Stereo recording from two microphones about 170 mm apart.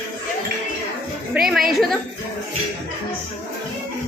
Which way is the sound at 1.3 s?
5° right (ahead or behind).